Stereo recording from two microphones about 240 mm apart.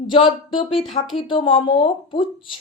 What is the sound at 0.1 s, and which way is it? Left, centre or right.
A woman's voice, left.